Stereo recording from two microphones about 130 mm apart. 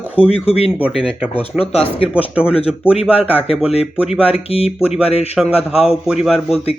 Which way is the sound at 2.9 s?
50° left (ahead or behind).